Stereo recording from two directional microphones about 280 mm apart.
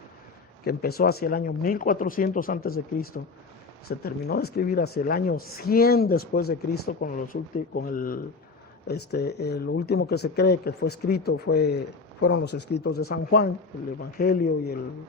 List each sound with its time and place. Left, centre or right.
0.6 s speech: left
3.8 s speech: left